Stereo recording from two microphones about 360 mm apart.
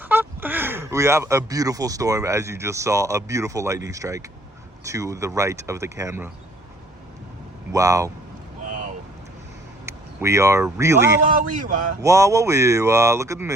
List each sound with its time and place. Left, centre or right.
0.0 s speech: centre
7.7 s speech: centre
8.6 s vehicle: right
9.8 s speech: centre